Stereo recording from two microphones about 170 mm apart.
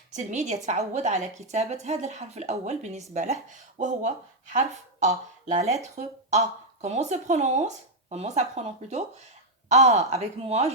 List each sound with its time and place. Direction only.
0.1 s a woman's voice: 45° right (ahead or behind)